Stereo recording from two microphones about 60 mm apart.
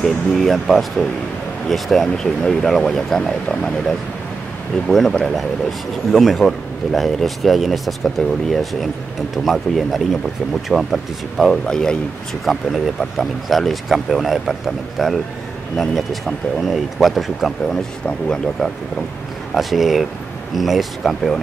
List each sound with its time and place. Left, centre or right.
0.0 s speech: centre
4.8 s speech: centre
11.6 s speech: centre
12.4 s speech: centre
17.6 s speech: centre
19.5 s speech: centre